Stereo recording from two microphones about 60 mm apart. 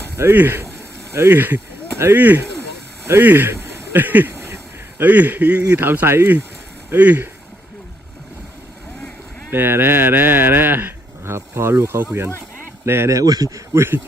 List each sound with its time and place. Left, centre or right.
0.0 s speech: right
4.4 s a sound: right
5.0 s a man's voice: right
6.9 s a man's voice: right
9.5 s speech: right
13.1 s speech: right
13.7 s speech: right